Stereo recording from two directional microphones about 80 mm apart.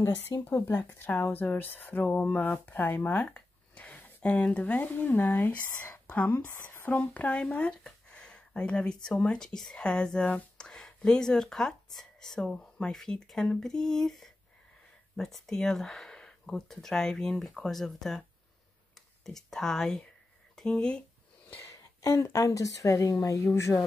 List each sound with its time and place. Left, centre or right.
0.0 s speech: left
6.3 s speech: left; by 21.0 s centre
21.6 s speech: left